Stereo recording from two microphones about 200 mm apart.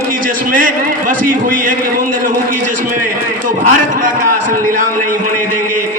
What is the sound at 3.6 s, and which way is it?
A man's voice, 40° right (ahead or behind).